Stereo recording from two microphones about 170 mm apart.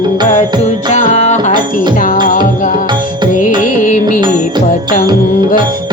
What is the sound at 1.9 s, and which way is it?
Music, 55° left (ahead or behind).